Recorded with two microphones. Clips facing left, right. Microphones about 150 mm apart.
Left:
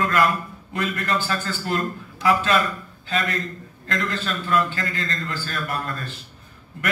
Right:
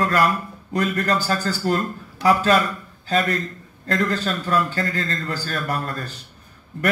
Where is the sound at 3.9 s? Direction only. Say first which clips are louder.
Right 4 dB; 40° right (ahead or behind).